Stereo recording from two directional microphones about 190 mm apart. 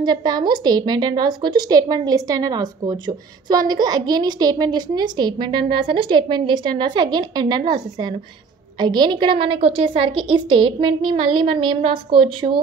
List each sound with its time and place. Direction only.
0.0 s a woman's voice: 20° right (ahead or behind)